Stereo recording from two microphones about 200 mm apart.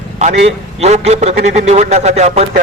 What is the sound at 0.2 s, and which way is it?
A man's voice, 35° right (ahead or behind).